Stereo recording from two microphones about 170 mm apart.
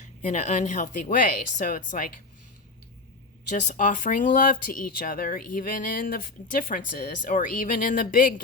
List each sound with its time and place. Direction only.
0.2 s speech: 45° left (ahead or behind)
3.5 s speech: 50° left (ahead or behind)